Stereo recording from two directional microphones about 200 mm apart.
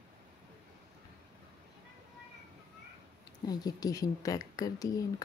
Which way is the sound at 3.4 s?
20° left (ahead or behind).